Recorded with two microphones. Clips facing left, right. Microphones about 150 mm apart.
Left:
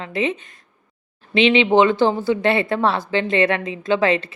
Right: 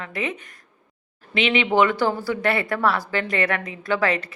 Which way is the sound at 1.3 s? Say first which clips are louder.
Left 5 dB; 30° left (ahead or behind).